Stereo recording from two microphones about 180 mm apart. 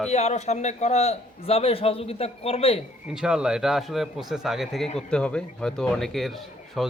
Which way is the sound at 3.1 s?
5° right (ahead or behind).